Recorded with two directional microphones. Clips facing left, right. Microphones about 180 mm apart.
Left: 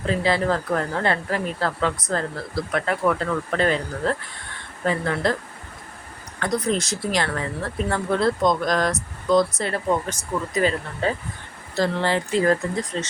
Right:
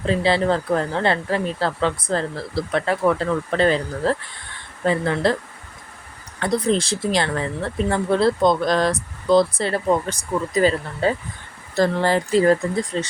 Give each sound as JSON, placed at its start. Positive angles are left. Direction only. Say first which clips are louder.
{"t": 0.1, "sound": "speech", "louder": "right 3 dB", "side_deg": -30}
{"t": 6.4, "sound": "speech", "louder": "right 3 dB", "side_deg": -30}